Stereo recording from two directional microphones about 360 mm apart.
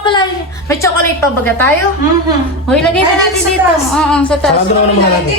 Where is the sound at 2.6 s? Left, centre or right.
Centre.